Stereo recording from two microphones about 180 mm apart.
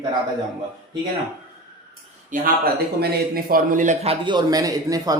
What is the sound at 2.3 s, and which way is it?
A man's voice, 55° right (ahead or behind).